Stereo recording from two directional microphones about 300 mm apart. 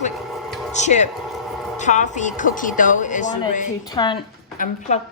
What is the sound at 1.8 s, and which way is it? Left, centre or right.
A woman's voice, left.